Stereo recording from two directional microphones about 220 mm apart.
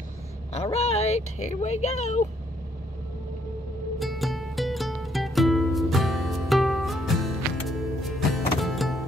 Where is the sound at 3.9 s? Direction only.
Centre (ahead or behind).